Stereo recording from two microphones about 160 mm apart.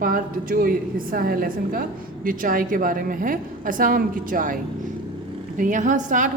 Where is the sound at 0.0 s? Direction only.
65° right (ahead or behind).